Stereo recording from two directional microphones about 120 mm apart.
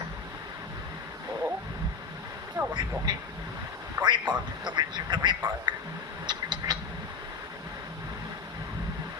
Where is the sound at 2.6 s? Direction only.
35° right (ahead or behind).